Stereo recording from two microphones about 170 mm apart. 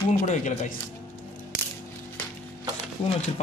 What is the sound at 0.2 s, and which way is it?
Speech, 45° left (ahead or behind).